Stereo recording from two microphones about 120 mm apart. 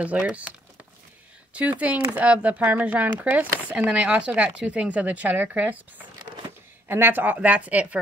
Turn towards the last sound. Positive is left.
turn(degrees=-10)  # may be behind; listen again after turning